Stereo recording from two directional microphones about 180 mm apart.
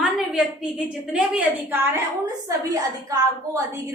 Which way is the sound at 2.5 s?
20° right (ahead or behind).